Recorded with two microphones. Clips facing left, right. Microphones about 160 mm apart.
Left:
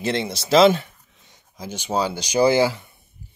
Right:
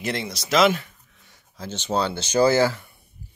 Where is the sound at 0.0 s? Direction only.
30° left (ahead or behind).